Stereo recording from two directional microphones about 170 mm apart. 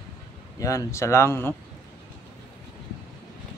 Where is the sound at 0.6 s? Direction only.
20° left (ahead or behind).